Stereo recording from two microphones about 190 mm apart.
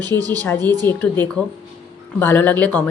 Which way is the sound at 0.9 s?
10° left (ahead or behind).